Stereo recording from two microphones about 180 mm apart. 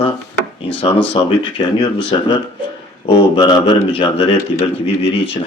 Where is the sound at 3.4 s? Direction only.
25° left (ahead or behind).